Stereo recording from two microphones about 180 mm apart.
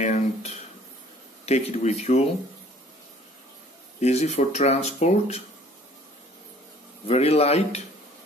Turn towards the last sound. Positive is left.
turn(degrees=35)  # may be behind; listen again after turning